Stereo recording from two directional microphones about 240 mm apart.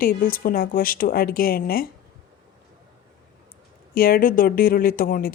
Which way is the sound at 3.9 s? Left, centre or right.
Left.